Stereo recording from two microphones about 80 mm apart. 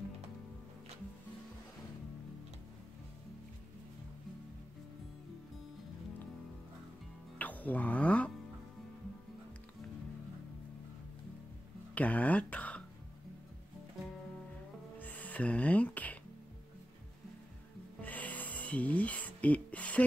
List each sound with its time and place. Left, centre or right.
7.3 s music: centre
11.9 s speech: centre
15.0 s music: left
18.0 s music: centre